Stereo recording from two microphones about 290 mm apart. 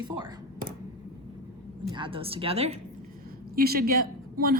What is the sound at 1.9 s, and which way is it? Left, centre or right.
Speech, centre.